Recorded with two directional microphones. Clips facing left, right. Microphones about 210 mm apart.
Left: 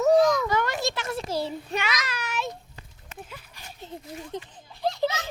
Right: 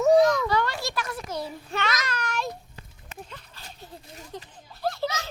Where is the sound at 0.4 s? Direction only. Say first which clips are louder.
Left 1 dB; 20° left (ahead or behind).